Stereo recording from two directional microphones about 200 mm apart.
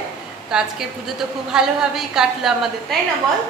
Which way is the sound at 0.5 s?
Centre (ahead or behind).